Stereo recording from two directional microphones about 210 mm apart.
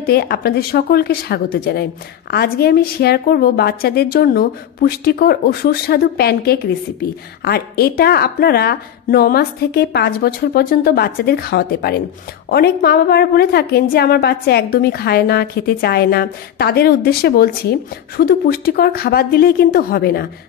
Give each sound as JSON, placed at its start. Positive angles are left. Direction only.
{"t": 0.0, "sound": "a woman's voice", "side_deg": 50}